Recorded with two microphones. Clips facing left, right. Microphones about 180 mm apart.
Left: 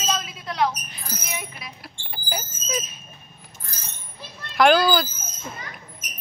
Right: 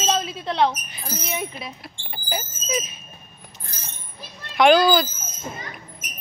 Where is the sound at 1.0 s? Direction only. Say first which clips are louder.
Right 6 dB; 25° right (ahead or behind).